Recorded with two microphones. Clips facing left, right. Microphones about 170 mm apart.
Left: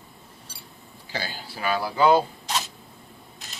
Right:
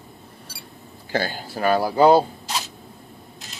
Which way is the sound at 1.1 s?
50° right (ahead or behind).